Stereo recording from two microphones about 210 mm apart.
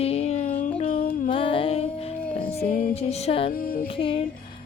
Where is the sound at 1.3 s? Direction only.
25° left (ahead or behind).